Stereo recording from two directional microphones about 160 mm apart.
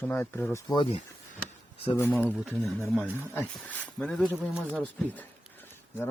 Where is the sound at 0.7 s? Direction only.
30° left (ahead or behind).